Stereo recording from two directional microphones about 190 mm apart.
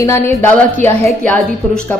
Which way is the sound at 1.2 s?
5° left (ahead or behind).